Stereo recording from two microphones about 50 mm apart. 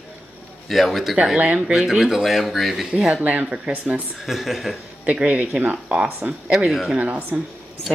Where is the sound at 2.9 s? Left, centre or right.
Centre.